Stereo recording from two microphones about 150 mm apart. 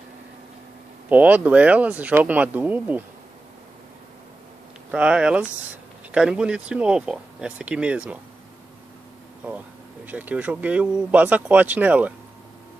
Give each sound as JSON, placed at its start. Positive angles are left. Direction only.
{"t": 1.0, "sound": "speech", "side_deg": -10}
{"t": 4.9, "sound": "speech", "side_deg": -5}
{"t": 9.4, "sound": "speech", "side_deg": -10}